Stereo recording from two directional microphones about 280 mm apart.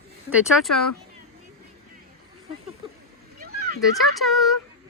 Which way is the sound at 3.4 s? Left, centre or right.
Right.